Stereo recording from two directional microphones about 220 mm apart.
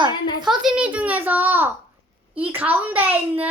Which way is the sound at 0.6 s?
5° right (ahead or behind).